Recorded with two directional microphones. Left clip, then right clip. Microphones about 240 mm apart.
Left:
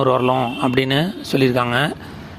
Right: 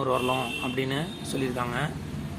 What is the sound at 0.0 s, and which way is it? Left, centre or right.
Speech, left.